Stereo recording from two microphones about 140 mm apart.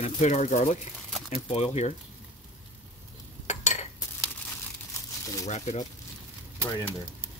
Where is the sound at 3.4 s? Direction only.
55° left (ahead or behind).